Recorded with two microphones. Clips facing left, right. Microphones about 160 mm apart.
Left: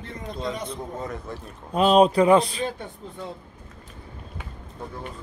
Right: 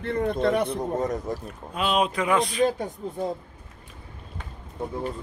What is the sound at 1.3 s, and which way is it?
Speech, 40° right (ahead or behind).